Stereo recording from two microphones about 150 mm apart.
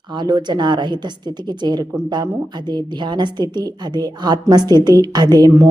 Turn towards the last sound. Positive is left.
turn(degrees=-25)  # may be behind; listen again after turning